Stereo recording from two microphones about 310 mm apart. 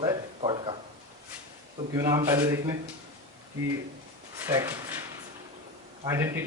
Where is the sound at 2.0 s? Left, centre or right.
Centre.